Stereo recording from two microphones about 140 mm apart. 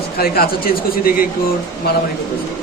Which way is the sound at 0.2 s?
90° left.